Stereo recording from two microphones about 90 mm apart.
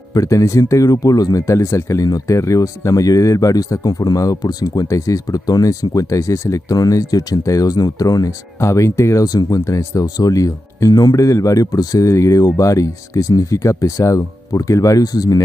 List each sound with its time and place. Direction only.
0.1 s speech: 35° left (ahead or behind)